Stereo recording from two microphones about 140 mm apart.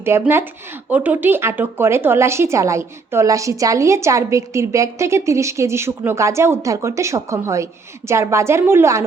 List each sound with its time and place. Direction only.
0.0 s speech: 15° right (ahead or behind)